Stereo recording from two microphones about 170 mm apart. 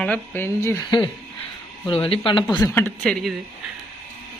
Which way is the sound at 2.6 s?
15° left (ahead or behind).